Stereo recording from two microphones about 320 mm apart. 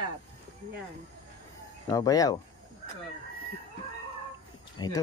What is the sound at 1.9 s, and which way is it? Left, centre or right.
Speech, centre.